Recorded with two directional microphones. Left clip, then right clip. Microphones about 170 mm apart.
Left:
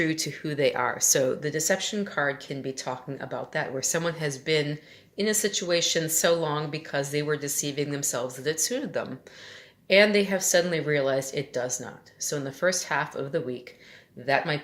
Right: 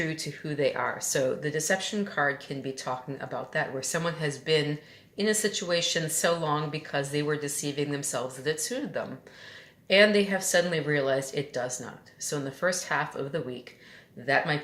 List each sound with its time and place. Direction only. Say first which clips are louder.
0.0 s speech: left 5 dB; 40° left (ahead or behind)